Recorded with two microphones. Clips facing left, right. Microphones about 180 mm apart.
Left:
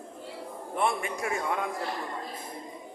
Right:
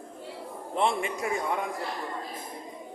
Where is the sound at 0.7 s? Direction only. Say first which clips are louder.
Right 2 dB; 25° right (ahead or behind).